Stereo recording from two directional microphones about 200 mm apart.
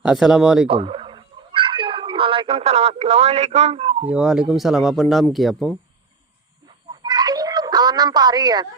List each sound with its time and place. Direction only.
0.0 s speech: centre (ahead or behind)
0.7 s cat: 25° right (ahead or behind)
4.1 s speech: 5° right (ahead or behind)
6.9 s a sound: 20° right (ahead or behind)